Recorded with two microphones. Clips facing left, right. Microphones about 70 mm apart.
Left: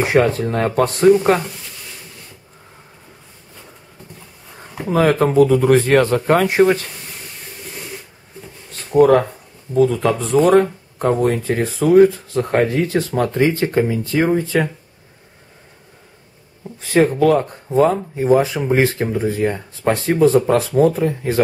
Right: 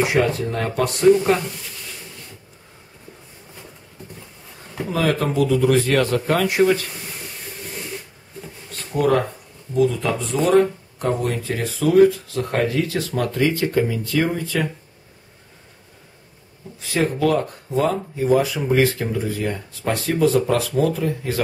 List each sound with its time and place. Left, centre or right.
0.0 s speech: left
4.8 s speech: left
8.9 s speech: left
16.9 s speech: left